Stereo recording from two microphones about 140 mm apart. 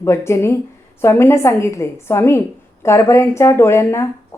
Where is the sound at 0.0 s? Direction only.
20° left (ahead or behind).